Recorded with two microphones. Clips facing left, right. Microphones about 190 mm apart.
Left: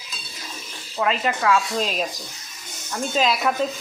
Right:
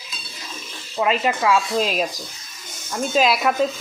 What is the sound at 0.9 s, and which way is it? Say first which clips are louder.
Speech: right 2 dB; 15° right (ahead or behind).